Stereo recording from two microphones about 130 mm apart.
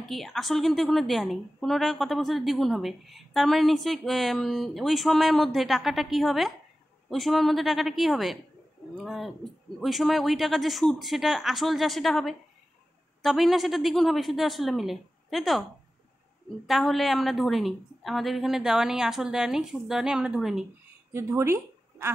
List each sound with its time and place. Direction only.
0.0 s a woman's voice: centre (ahead or behind)
16.6 s a woman's voice: centre (ahead or behind)
21.1 s speech: 20° right (ahead or behind)